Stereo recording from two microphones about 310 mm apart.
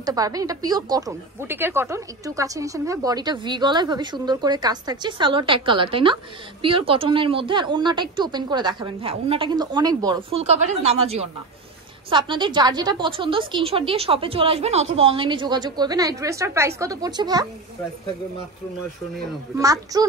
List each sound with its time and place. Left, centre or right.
0.0 s speech: centre
19.5 s speech: centre